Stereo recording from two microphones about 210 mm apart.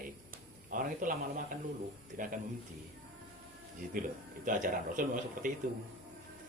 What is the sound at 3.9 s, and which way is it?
Speech, 40° right (ahead or behind).